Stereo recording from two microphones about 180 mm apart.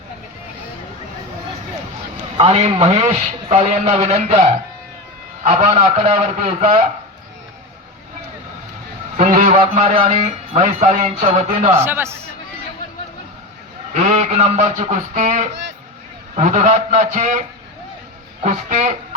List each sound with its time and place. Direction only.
2.4 s a man's voice: 35° right (ahead or behind)
9.1 s a man's voice: 45° right (ahead or behind)
11.8 s a man's voice: 10° right (ahead or behind)
13.9 s a man's voice: 40° right (ahead or behind)
18.4 s a man's voice: 40° right (ahead or behind)